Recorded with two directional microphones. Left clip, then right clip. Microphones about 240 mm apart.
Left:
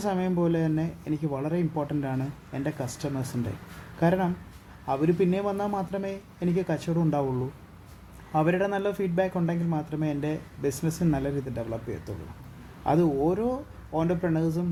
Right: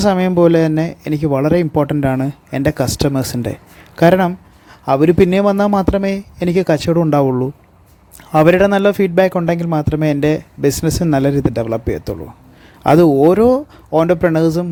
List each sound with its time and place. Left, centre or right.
0.0 s a man's voice: right